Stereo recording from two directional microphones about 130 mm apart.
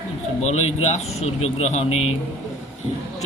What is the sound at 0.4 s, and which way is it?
Speech, 60° left (ahead or behind).